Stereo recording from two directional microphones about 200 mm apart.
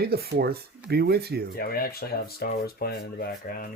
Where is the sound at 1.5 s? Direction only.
50° left (ahead or behind).